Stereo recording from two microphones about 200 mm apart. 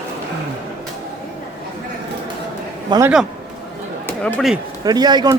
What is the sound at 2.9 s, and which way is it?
Speech, 15° right (ahead or behind).